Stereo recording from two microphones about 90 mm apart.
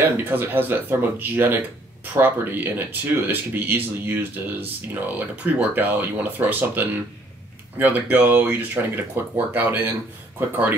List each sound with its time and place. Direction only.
0.0 s speech: 20° right (ahead or behind)